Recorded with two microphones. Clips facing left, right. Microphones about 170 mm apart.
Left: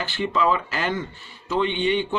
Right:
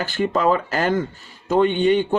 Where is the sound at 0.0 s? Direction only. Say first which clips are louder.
Right 3 dB; 45° right (ahead or behind).